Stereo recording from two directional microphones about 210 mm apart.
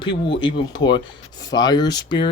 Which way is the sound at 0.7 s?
20° left (ahead or behind).